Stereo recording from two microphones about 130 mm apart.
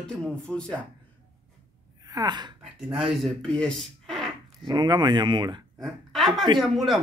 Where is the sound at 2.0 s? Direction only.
30° right (ahead or behind).